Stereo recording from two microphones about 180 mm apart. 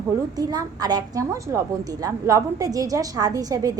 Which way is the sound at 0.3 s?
20° right (ahead or behind).